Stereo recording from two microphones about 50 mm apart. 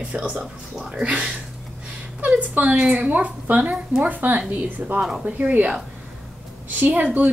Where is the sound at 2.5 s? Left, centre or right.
Right.